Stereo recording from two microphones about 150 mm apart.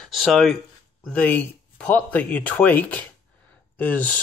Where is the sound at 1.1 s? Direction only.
10° left (ahead or behind).